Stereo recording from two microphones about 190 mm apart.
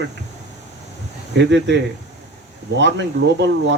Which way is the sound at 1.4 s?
70° right (ahead or behind).